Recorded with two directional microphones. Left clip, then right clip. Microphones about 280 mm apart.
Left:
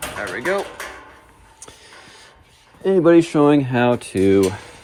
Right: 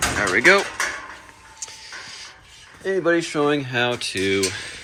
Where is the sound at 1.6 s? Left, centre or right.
Left.